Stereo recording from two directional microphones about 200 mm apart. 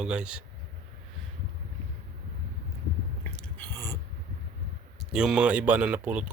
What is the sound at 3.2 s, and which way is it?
Chewing, 5° left (ahead or behind).